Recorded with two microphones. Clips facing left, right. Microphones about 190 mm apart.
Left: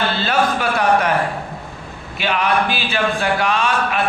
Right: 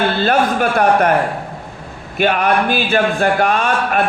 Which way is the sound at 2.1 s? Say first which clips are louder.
Right 4 dB; 50° right (ahead or behind).